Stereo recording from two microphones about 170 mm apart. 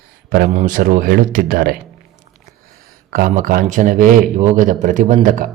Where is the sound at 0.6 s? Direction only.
50° right (ahead or behind).